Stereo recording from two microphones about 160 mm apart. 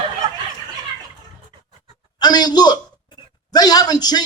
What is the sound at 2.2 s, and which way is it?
A man's voice, 25° left (ahead or behind).